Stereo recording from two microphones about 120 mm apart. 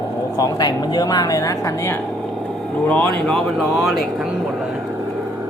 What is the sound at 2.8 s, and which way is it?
Speech, 10° left (ahead or behind).